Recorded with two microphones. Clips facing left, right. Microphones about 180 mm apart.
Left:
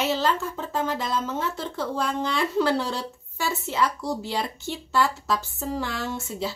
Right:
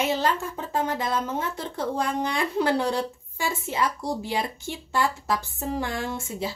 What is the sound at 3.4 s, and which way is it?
Speech, 50° right (ahead or behind).